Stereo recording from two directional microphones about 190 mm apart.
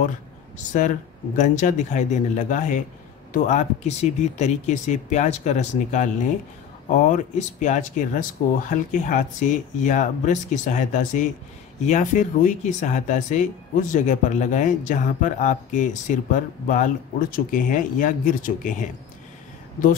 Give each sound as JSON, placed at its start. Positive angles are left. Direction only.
{"t": 0.7, "sound": "speech", "side_deg": 40}